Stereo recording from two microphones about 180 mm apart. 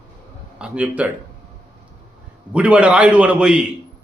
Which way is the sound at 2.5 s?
5° right (ahead or behind).